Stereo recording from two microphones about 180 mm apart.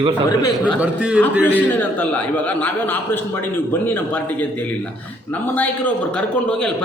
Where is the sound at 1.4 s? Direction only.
10° left (ahead or behind).